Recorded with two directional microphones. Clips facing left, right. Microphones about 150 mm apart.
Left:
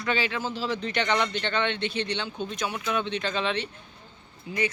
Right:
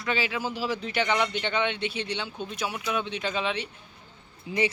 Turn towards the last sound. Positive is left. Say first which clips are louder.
# right 3 dB
turn(degrees=25)  # may be behind; listen again after turning